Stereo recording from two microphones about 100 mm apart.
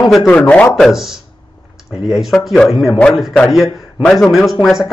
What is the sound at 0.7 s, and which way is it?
Speech, centre (ahead or behind).